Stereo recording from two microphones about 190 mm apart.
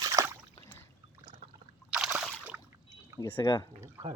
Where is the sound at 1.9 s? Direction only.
5° right (ahead or behind).